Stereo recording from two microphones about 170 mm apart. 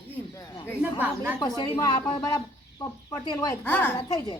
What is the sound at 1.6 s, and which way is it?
Speech, 25° left (ahead or behind).